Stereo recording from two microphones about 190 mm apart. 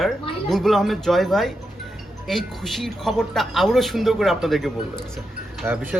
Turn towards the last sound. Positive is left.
turn(degrees=-10)  # may be behind; listen again after turning